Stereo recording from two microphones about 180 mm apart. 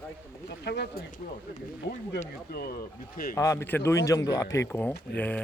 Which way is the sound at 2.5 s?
60° left (ahead or behind).